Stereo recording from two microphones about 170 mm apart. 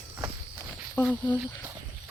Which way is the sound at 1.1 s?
15° left (ahead or behind).